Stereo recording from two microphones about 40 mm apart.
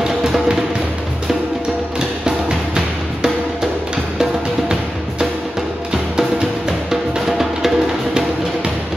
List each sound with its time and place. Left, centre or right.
0.0 s music: centre
2.2 s music: centre
6.9 s music: centre